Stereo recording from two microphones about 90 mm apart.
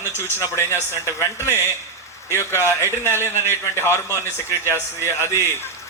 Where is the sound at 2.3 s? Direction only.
25° left (ahead or behind).